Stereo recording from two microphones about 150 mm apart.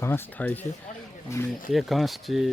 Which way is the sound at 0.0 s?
15° left (ahead or behind).